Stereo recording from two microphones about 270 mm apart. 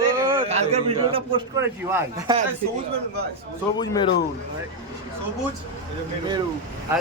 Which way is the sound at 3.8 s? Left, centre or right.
Centre.